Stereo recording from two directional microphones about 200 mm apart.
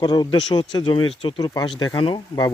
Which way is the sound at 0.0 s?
20° left (ahead or behind).